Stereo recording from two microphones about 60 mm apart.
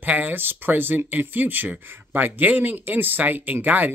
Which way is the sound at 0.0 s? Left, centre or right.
Right.